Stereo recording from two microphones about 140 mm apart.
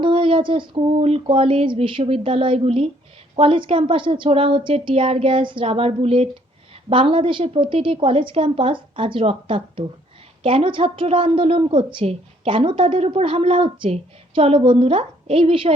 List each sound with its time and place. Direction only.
0.0 s a woman's voice: 35° right (ahead or behind)